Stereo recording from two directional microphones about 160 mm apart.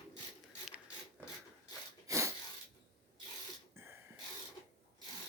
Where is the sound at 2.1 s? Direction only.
20° right (ahead or behind).